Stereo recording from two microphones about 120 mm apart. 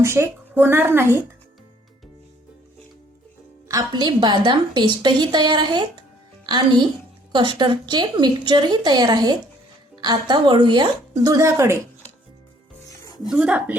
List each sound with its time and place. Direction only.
0.0 s speech: 20° right (ahead or behind)
3.7 s a woman's voice: 30° right (ahead or behind)
13.2 s a woman's voice: 5° right (ahead or behind)